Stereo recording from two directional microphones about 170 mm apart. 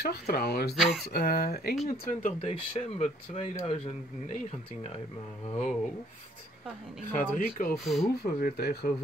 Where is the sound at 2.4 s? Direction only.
35° left (ahead or behind).